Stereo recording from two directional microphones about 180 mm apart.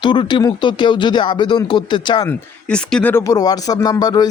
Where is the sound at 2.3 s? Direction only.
5° left (ahead or behind).